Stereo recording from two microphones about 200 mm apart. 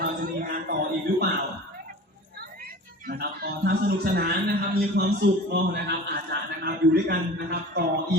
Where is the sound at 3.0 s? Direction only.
50° right (ahead or behind).